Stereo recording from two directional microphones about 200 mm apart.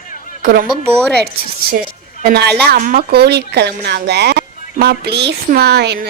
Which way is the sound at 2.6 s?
45° right (ahead or behind).